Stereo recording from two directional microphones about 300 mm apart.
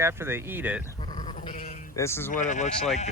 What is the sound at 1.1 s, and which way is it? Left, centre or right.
Sheep, centre.